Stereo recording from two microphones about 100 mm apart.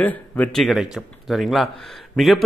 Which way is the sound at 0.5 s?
Centre (ahead or behind).